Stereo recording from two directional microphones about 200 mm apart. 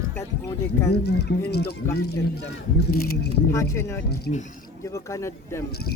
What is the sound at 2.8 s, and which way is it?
Speech, 50° left (ahead or behind).